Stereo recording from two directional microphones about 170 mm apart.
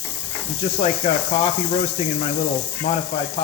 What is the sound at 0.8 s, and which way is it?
Speech, 40° left (ahead or behind).